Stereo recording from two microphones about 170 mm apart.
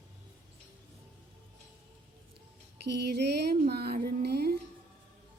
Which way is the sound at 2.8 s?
75° right (ahead or behind).